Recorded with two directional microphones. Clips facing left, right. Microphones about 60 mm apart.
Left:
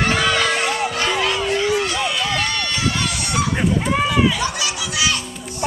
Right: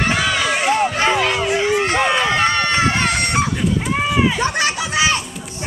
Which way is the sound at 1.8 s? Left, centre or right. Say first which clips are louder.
Right 5 dB; right.